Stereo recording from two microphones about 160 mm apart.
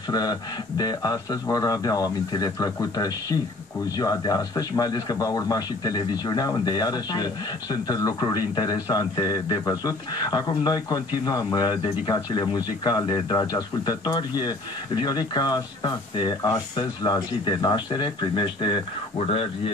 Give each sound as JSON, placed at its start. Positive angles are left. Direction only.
{"t": 0.1, "sound": "speech", "side_deg": 25}